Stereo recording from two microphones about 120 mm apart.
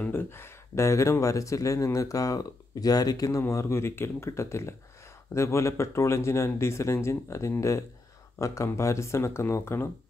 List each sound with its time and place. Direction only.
0.0 s speech: 20° left (ahead or behind)